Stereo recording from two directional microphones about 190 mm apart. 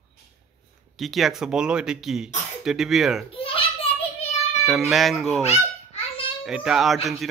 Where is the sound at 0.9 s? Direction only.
Centre (ahead or behind).